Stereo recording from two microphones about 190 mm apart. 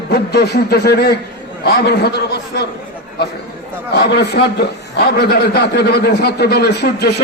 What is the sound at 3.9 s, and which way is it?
A man's voice, 60° left (ahead or behind).